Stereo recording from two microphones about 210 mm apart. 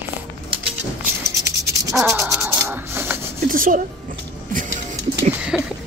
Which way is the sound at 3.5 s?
40° right (ahead or behind).